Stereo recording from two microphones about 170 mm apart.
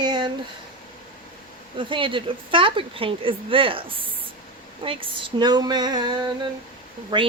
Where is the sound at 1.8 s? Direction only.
30° right (ahead or behind).